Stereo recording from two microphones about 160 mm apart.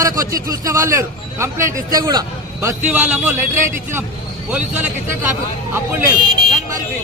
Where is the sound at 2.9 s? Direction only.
10° right (ahead or behind).